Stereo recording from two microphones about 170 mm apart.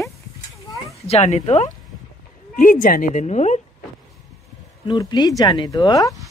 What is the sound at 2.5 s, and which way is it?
Speech, 50° left (ahead or behind).